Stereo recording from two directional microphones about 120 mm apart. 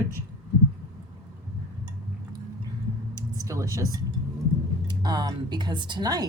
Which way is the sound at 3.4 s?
25° right (ahead or behind).